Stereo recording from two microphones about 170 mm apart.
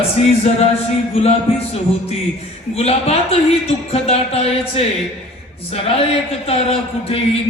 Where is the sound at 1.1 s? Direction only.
35° left (ahead or behind).